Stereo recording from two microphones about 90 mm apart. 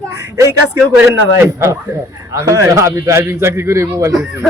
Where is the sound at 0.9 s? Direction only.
30° right (ahead or behind).